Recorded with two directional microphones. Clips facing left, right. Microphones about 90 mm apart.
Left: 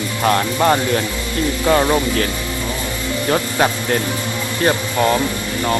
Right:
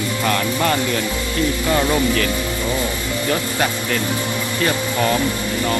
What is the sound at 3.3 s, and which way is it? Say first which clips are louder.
Speech: left 5 dB; 45° left (ahead or behind).